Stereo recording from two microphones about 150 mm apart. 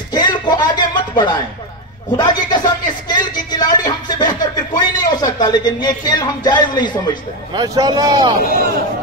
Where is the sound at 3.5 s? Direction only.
30° left (ahead or behind).